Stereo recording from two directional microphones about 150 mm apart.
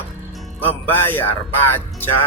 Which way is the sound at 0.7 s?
15° left (ahead or behind).